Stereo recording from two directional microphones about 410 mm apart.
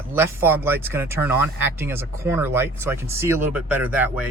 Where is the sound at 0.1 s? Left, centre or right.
Centre.